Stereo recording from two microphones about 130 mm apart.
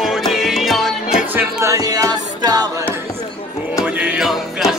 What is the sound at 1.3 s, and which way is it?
Music, 25° right (ahead or behind).